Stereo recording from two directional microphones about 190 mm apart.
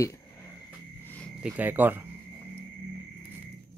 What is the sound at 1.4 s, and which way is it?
Speech, 10° right (ahead or behind).